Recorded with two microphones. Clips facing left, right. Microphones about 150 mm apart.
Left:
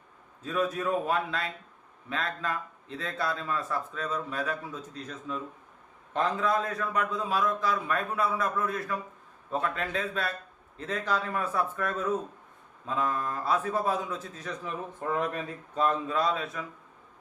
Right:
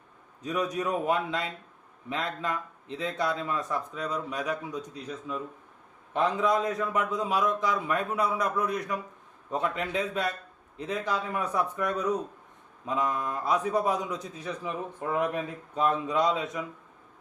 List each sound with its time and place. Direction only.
0.4 s a man's voice: 15° right (ahead or behind)